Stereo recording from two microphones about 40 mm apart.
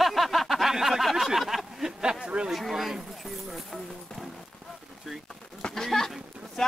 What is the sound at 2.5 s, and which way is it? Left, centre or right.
Speech, centre.